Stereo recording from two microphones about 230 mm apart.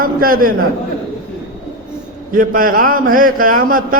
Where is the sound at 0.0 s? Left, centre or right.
Right.